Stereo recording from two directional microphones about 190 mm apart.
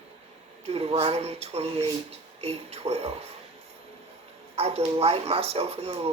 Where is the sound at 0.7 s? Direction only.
30° right (ahead or behind).